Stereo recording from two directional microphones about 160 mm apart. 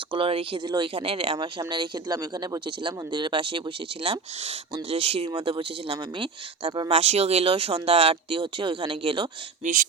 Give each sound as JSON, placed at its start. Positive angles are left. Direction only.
{"t": 0.1, "sound": "speech", "side_deg": -35}